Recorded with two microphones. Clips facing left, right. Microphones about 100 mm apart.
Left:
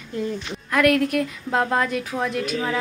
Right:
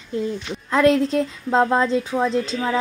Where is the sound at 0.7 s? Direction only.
25° right (ahead or behind).